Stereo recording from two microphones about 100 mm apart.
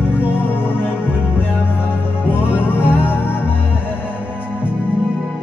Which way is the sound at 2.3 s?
20° left (ahead or behind).